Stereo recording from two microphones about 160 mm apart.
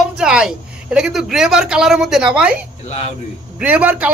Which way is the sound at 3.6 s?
10° right (ahead or behind).